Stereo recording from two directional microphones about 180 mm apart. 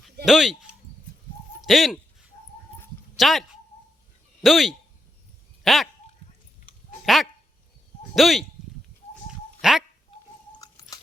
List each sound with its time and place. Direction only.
0.3 s speech: centre (ahead or behind)
3.2 s speech: centre (ahead or behind)
4.4 s speech: centre (ahead or behind)
7.0 s speech: centre (ahead or behind)
9.6 s a sound: centre (ahead or behind)
10.6 s chewing: 20° left (ahead or behind)